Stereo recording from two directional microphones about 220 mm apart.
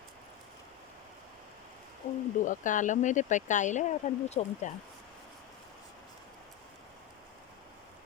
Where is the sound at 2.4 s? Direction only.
35° left (ahead or behind).